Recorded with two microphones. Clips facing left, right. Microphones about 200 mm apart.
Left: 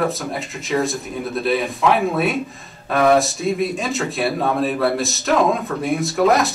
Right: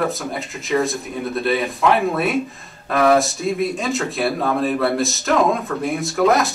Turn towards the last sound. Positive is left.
turn(degrees=0)  # may be behind; listen again after turning